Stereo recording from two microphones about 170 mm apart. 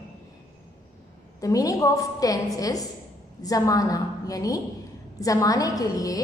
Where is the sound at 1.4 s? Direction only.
20° left (ahead or behind).